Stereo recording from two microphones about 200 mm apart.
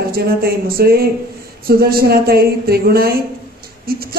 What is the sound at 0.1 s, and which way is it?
A woman's voice, 50° right (ahead or behind).